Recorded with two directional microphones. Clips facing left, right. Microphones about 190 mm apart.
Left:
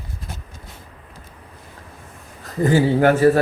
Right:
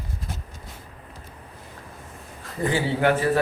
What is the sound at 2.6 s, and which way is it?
Speech, 45° left (ahead or behind).